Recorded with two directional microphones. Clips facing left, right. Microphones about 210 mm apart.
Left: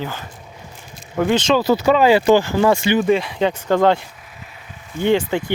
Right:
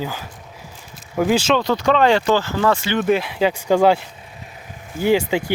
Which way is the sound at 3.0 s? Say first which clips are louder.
Left 1 dB; centre (ahead or behind).